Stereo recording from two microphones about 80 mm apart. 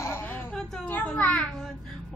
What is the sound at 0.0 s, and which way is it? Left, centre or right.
Whimper, left.